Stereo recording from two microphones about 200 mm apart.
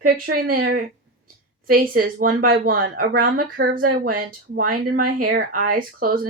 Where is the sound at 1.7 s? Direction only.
45° right (ahead or behind).